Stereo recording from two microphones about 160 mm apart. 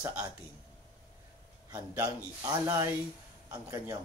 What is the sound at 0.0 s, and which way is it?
Speech, 10° right (ahead or behind).